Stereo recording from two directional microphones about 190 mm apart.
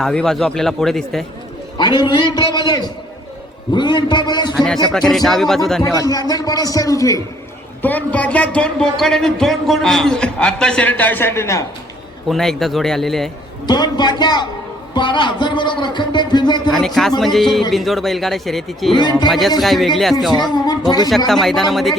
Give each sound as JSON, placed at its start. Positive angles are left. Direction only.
{"t": 0.0, "sound": "speech", "side_deg": 5}
{"t": 1.8, "sound": "speech", "side_deg": 25}
{"t": 4.9, "sound": "speech", "side_deg": 0}
{"t": 6.0, "sound": "speech", "side_deg": 20}
{"t": 12.3, "sound": "speech", "side_deg": 0}
{"t": 13.7, "sound": "speech", "side_deg": 20}
{"t": 16.7, "sound": "speech", "side_deg": 0}
{"t": 18.9, "sound": "speech", "side_deg": 25}
{"t": 19.3, "sound": "speech", "side_deg": 0}
{"t": 20.5, "sound": "speech", "side_deg": 20}
{"t": 21.2, "sound": "speech", "side_deg": 0}